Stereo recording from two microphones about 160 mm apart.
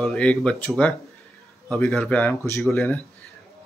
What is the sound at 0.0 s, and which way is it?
A man's voice, 5° left (ahead or behind).